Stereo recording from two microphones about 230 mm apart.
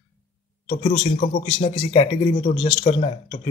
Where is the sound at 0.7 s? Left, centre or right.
Left.